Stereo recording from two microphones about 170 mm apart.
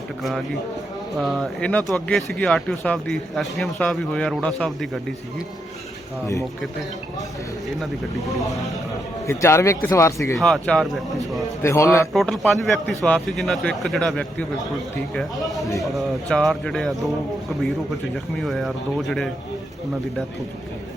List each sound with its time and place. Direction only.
0.2 s speech: centre (ahead or behind)
9.2 s speech: 15° left (ahead or behind)
10.3 s speech: centre (ahead or behind)
11.6 s speech: 15° left (ahead or behind)
12.1 s speech: centre (ahead or behind)
18.3 s speech: centre (ahead or behind)